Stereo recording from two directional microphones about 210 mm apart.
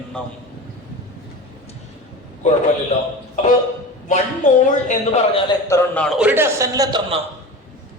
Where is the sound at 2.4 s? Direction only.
35° left (ahead or behind).